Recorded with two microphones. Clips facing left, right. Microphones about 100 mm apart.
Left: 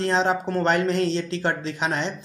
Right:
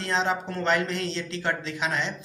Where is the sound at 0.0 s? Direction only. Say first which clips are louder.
Left 5 dB; 40° left (ahead or behind).